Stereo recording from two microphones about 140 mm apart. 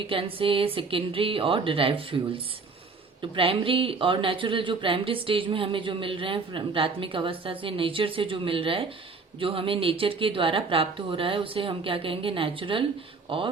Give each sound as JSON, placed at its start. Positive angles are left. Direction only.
{"t": 0.1, "sound": "speech", "side_deg": -40}